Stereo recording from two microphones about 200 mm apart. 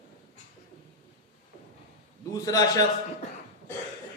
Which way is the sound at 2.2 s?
20° left (ahead or behind).